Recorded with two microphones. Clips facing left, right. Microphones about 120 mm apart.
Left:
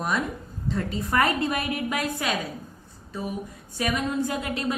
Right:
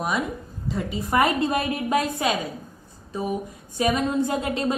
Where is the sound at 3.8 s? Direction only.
25° right (ahead or behind).